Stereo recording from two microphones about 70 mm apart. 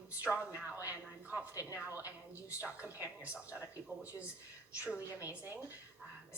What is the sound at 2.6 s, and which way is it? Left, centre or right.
Speech, right.